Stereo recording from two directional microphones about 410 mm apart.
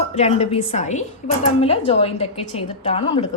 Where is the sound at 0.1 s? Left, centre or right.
Centre.